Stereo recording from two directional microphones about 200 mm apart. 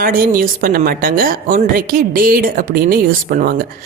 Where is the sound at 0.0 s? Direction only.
45° right (ahead or behind).